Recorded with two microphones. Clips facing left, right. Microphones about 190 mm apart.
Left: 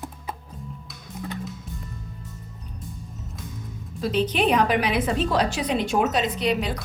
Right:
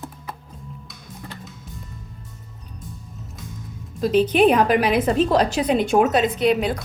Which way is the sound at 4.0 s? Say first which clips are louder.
Right 7 dB; 45° right (ahead or behind).